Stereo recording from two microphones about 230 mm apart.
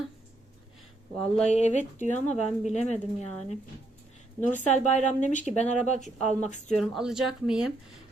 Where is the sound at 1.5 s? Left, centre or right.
Left.